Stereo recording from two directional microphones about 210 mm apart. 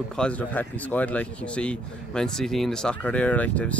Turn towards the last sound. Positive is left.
turn(degrees=5)  # may be behind; listen again after turning